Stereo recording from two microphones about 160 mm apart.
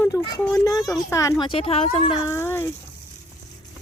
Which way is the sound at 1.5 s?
35° left (ahead or behind).